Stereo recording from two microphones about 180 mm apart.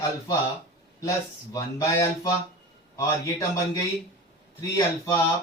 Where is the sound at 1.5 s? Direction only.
15° left (ahead or behind).